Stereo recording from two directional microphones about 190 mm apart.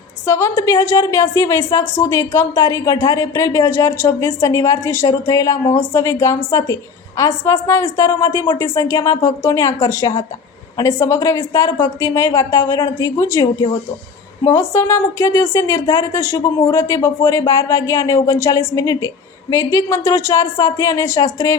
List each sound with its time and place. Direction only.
0.3 s a woman's voice: 15° left (ahead or behind)